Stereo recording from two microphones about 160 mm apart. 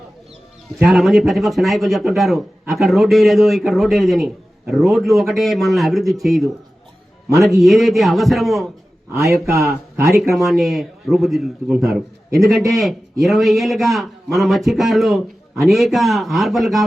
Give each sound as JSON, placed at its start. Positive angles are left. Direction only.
{"t": 0.8, "sound": "a man's voice", "side_deg": 0}
{"t": 9.1, "sound": "speech", "side_deg": -20}
{"t": 10.3, "sound": "a man's voice", "side_deg": 0}